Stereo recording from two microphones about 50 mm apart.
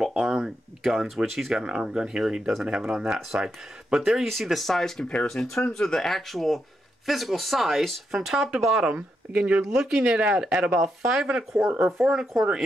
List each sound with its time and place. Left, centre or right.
0.2 s speech: centre
8.8 s speech: right
9.8 s speech: centre
10.0 s speech: right
10.3 s speech: centre